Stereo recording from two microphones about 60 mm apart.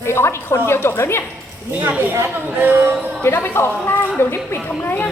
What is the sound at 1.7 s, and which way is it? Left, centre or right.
Speech, right.